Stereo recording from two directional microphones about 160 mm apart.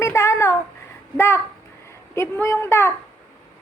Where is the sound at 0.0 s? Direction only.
20° left (ahead or behind).